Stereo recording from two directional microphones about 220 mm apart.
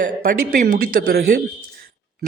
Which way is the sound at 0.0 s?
35° right (ahead or behind).